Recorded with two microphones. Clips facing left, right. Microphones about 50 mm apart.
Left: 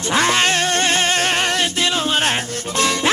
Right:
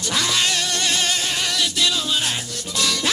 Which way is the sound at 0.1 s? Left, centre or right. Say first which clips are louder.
Left 6 dB; left.